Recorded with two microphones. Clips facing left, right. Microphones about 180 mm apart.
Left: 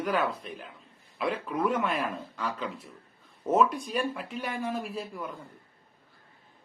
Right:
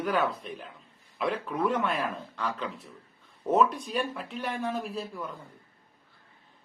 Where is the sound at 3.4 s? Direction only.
5° left (ahead or behind).